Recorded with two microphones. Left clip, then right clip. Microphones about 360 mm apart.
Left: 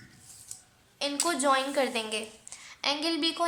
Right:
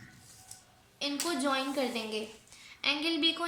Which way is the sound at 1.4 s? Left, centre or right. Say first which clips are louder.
Left 7 dB; centre.